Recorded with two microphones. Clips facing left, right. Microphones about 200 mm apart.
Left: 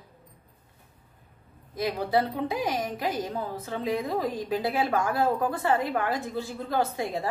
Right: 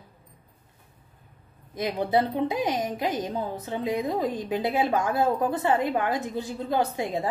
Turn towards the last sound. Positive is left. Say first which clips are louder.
# right 2 dB
turn(degrees=-20)  # may be behind; listen again after turning